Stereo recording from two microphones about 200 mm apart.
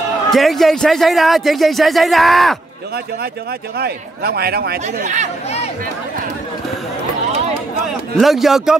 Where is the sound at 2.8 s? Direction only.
50° right (ahead or behind).